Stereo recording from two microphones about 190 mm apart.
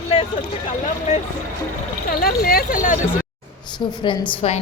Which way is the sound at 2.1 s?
50° left (ahead or behind).